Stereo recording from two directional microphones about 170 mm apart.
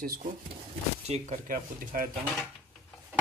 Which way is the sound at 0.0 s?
55° right (ahead or behind).